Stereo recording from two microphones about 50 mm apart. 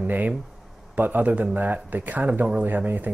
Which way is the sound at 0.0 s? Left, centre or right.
Right.